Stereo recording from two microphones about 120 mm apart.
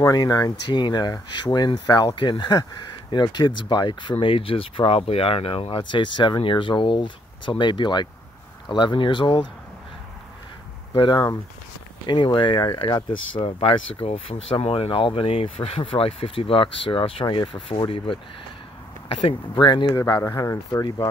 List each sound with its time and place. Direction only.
0.0 s speech: 30° left (ahead or behind)
10.9 s speech: 40° left (ahead or behind)
19.5 s speech: 40° left (ahead or behind)
20.2 s speech: 25° left (ahead or behind)